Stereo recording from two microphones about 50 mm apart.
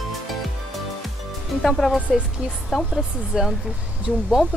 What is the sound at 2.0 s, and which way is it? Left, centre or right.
Speech, right.